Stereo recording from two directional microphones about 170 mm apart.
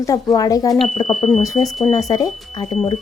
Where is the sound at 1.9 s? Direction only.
20° left (ahead or behind).